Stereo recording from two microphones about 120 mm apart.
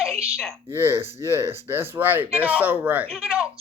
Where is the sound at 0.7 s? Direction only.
20° right (ahead or behind).